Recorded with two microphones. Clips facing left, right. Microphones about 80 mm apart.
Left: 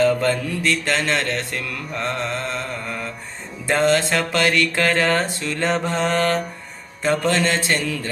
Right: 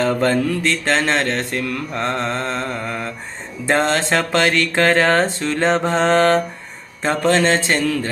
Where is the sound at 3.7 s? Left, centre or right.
Right.